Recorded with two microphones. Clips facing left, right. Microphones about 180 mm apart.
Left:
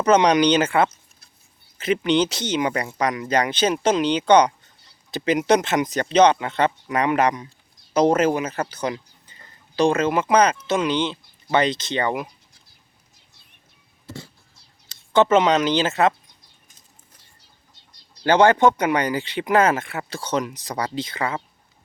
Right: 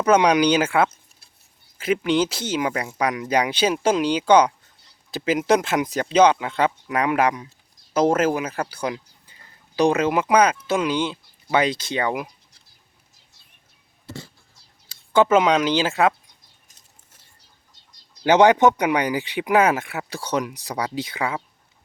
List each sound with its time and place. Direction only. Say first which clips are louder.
0.0 s speech: left 1 dB; 5° right (ahead or behind)
15.1 s speech: even; 10° right (ahead or behind)
18.2 s speech: right 1 dB; 15° right (ahead or behind)